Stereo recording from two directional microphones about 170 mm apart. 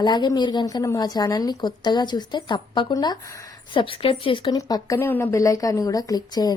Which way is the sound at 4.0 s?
30° left (ahead or behind).